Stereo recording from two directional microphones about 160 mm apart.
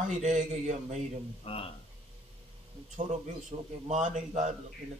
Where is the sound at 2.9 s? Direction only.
50° right (ahead or behind).